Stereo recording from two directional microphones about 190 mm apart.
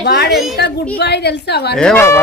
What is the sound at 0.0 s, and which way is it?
A woman's voice, 60° left (ahead or behind).